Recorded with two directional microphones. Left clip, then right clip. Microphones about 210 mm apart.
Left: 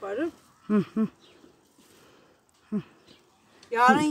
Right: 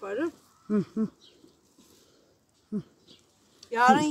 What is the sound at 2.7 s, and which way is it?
Speech, 20° left (ahead or behind).